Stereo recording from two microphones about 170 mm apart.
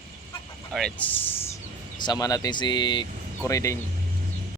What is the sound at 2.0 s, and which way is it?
Speech, 25° left (ahead or behind).